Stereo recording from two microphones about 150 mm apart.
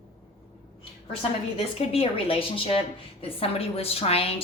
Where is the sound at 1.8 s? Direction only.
40° left (ahead or behind).